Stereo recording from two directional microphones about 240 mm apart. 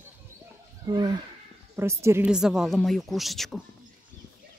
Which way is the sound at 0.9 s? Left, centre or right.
Centre.